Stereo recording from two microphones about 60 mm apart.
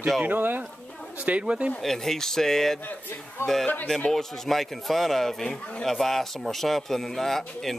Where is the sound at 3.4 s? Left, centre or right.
Left.